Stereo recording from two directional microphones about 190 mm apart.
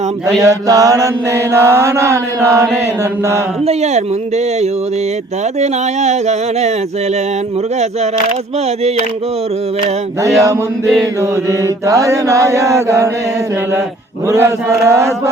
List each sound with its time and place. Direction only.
0.4 s mantra: 20° right (ahead or behind)
3.7 s speech: 35° right (ahead or behind)
5.5 s speech: 35° right (ahead or behind)
11.2 s mantra: 15° right (ahead or behind)
14.3 s mantra: 15° right (ahead or behind)